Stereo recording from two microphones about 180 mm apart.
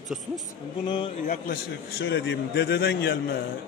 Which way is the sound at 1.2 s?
50° left (ahead or behind).